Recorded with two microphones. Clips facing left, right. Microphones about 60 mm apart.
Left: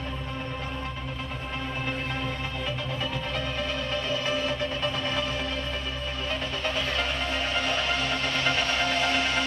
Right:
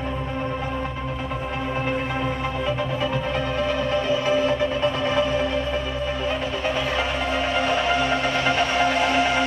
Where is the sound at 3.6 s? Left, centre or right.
Centre.